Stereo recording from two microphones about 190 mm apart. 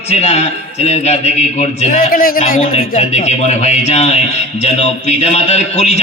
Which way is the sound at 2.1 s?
50° left (ahead or behind).